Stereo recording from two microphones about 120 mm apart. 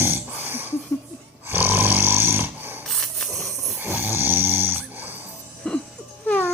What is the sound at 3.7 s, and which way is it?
Snoring, 15° right (ahead or behind).